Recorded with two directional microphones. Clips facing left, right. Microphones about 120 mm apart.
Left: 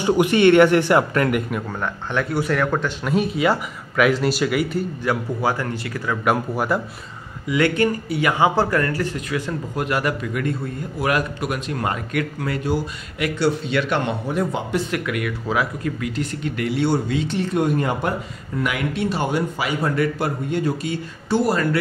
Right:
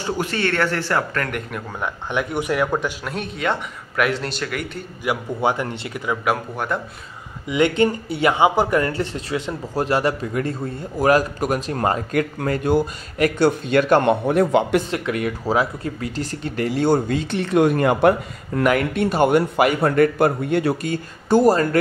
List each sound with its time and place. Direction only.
0.0 s speech: 15° left (ahead or behind)
1.8 s speech: 15° right (ahead or behind)
3.1 s a man's voice: 5° left (ahead or behind)
5.1 s speech: 15° right (ahead or behind)
6.2 s a man's voice: 5° left (ahead or behind)
7.4 s speech: 20° right (ahead or behind); by 14.1 s 45° right (ahead or behind)
14.2 s speech: 75° right (ahead or behind)
14.9 s speech: 30° right (ahead or behind); by 17.4 s 45° right (ahead or behind)
17.4 s speech: 75° right (ahead or behind)
18.6 s speech: 50° right (ahead or behind)
20.9 s speech: 45° right (ahead or behind)